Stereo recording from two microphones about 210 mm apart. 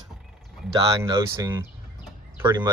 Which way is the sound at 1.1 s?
15° right (ahead or behind).